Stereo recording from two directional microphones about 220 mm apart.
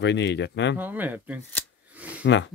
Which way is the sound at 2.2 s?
55° left (ahead or behind).